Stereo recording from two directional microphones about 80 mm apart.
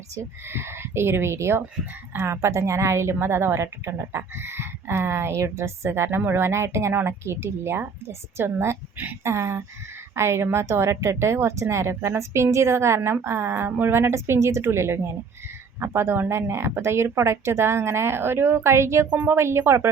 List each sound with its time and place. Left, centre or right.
0.4 s a woman's voice: right
19.1 s speech: right
19.4 s a woman's voice: right